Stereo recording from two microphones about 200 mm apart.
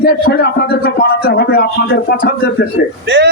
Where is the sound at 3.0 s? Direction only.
60° right (ahead or behind).